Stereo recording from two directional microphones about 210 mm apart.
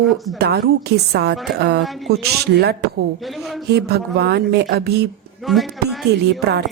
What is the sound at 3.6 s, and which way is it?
A woman's voice, 50° right (ahead or behind).